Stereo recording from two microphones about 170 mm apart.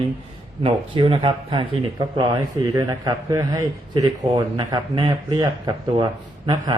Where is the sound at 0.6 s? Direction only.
30° right (ahead or behind).